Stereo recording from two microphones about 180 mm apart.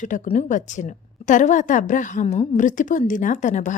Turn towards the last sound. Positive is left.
turn(degrees=45)  # may be behind; listen again after turning